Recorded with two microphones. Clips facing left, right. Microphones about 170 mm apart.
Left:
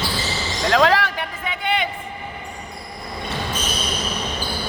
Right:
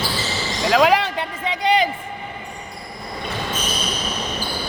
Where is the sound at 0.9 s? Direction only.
25° right (ahead or behind).